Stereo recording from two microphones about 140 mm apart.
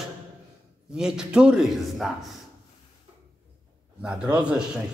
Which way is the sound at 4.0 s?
5° right (ahead or behind).